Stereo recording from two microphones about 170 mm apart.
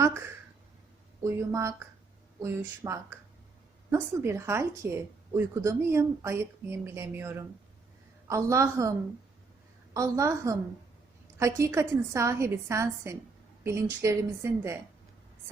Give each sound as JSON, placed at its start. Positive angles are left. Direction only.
{"t": 1.2, "sound": "a woman's voice", "side_deg": -15}